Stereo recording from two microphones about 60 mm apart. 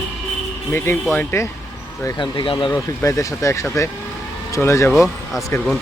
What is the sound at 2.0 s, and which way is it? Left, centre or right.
Speech, left.